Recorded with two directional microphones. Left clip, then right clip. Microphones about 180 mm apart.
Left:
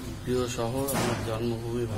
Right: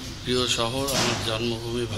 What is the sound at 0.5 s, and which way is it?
A man's voice, 5° right (ahead or behind).